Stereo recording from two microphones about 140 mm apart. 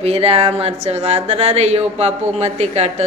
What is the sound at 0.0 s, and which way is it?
Speech, 45° right (ahead or behind).